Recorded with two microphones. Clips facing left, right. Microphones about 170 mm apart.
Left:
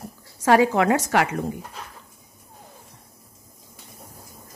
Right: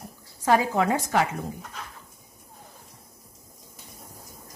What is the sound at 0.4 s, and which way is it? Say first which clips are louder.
A woman's voice: left 4 dB; 75° left (ahead or behind).